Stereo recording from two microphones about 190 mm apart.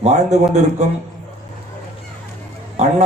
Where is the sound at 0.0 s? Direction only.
35° right (ahead or behind).